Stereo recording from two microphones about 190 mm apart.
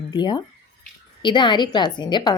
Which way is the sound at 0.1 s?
20° left (ahead or behind).